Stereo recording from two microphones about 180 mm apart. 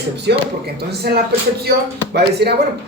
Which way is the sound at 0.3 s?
65° right (ahead or behind).